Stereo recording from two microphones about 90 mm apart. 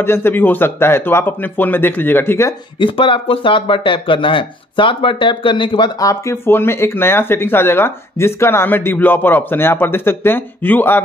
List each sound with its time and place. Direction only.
0.0 s speech: 25° left (ahead or behind)
2.8 s speech: 70° left (ahead or behind)
5.9 s speech: 35° left (ahead or behind); by 11.0 s 20° left (ahead or behind)